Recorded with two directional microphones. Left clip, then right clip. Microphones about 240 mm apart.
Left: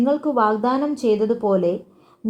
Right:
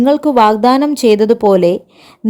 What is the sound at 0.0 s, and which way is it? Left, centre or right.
Speech, right.